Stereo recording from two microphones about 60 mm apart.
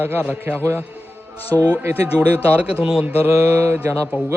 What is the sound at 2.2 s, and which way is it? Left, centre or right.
Speech, right.